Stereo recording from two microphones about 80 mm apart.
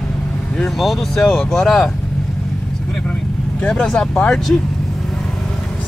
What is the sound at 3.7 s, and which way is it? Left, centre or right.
Speech, centre.